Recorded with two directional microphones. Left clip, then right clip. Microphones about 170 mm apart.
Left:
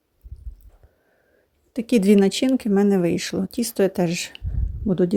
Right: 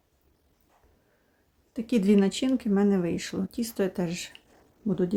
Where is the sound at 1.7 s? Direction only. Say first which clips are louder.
Left 7 dB; 35° left (ahead or behind).